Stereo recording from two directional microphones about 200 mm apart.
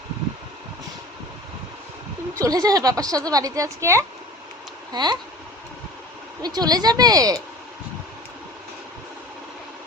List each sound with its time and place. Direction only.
2.4 s speech: 20° right (ahead or behind)
6.4 s speech: 20° right (ahead or behind)